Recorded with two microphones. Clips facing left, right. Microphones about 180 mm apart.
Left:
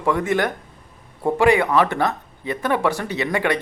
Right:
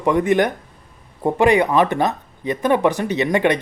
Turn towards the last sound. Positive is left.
turn(degrees=-20)  # may be behind; listen again after turning